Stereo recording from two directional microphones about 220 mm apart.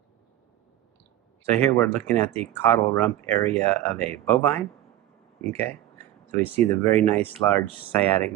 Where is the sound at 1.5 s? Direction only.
10° left (ahead or behind).